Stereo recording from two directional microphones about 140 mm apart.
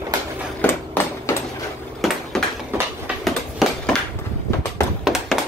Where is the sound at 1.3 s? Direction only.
15° left (ahead or behind).